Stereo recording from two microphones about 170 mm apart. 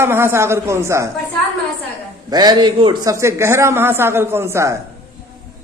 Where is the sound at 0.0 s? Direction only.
15° right (ahead or behind).